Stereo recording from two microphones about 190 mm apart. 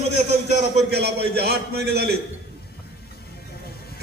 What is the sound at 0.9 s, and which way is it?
A man's voice, 60° right (ahead or behind).